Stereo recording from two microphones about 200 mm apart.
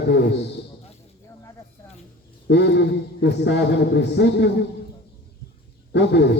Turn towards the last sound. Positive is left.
turn(degrees=60)  # may be behind; listen again after turning